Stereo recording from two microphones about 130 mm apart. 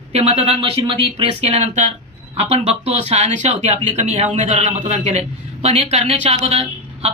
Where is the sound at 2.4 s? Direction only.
50° right (ahead or behind).